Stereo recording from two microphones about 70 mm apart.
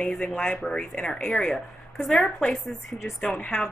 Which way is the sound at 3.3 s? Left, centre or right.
Centre.